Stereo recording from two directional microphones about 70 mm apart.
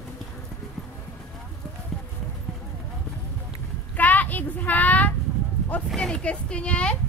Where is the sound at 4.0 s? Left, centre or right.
Left.